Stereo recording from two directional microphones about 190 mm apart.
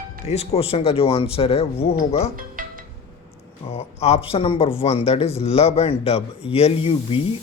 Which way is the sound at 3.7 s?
35° left (ahead or behind).